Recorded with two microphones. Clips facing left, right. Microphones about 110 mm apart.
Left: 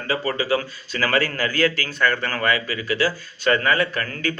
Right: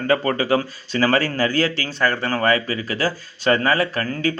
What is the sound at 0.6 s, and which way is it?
Speech, 30° right (ahead or behind).